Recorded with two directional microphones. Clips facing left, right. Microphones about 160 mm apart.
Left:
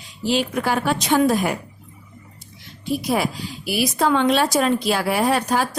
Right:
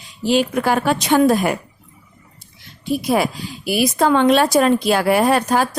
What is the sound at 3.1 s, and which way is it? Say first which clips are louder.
A woman's voice: right 4 dB; 50° right (ahead or behind).